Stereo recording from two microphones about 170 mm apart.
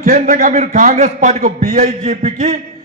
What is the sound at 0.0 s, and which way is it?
A man's voice, 45° right (ahead or behind).